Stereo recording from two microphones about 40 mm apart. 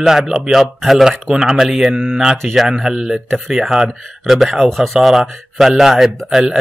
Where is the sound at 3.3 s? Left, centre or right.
Centre.